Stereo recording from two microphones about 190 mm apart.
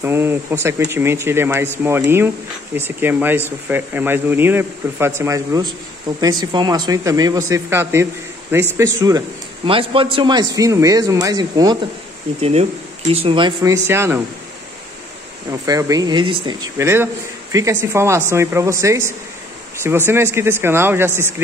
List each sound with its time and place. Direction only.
0.0 s speech: 10° right (ahead or behind)
9.7 s a man's voice: 30° right (ahead or behind)
12.4 s a man's voice: 35° right (ahead or behind)
13.6 s speech: 15° right (ahead or behind)
15.6 s a man's voice: 20° right (ahead or behind)
16.7 s speech: 15° right (ahead or behind)